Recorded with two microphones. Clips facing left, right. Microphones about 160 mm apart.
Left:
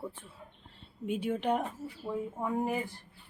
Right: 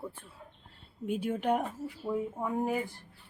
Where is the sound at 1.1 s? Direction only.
Centre (ahead or behind).